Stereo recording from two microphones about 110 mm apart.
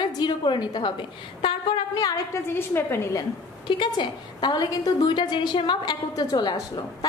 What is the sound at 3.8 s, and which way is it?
A woman's voice, 45° left (ahead or behind).